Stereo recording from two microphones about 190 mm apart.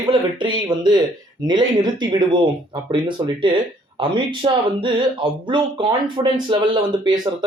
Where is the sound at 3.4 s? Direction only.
25° right (ahead or behind).